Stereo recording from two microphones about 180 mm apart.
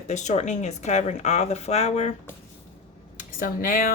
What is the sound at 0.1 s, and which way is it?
Speech, 40° left (ahead or behind).